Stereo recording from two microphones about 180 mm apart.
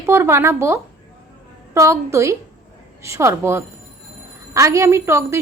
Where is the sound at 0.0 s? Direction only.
15° right (ahead or behind).